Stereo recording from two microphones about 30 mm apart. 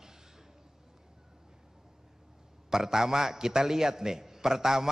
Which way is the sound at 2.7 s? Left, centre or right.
Centre.